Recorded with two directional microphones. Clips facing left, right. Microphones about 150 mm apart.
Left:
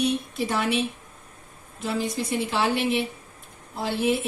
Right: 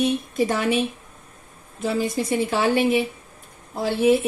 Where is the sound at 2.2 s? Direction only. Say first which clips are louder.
Right 3 dB; 50° right (ahead or behind).